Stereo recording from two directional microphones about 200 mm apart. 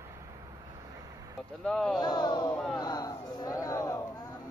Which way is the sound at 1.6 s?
5° left (ahead or behind).